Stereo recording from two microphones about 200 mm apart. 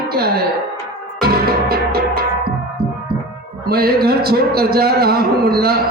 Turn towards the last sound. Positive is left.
turn(degrees=-50)  # may be behind; listen again after turning